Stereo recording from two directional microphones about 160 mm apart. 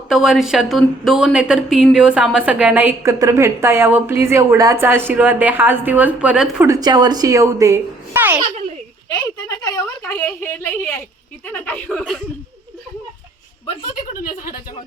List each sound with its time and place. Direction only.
0.1 s speech: 5° right (ahead or behind)
6.7 s a child's voice: 25° right (ahead or behind)
9.1 s a woman's voice: 25° left (ahead or behind)
10.0 s a woman's voice: 10° left (ahead or behind)
14.1 s speech: 65° left (ahead or behind)